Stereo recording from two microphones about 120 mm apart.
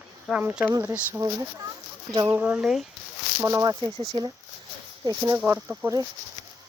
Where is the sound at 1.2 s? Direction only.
30° right (ahead or behind).